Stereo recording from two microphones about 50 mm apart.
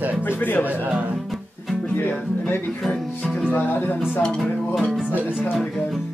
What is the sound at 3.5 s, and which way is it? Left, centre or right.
Speech, left.